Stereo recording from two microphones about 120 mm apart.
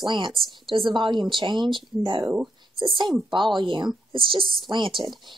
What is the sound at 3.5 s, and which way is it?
A woman's voice, 40° right (ahead or behind).